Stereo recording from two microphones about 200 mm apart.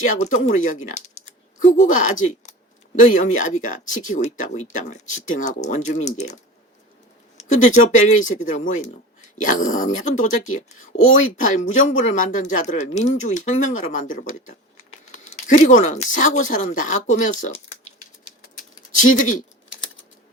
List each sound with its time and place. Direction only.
0.0 s speech: 40° left (ahead or behind)
7.3 s speech: 35° left (ahead or behind)
10.9 s speech: 80° left
11.3 s speech: 40° left (ahead or behind)
18.3 s typing: 40° left (ahead or behind)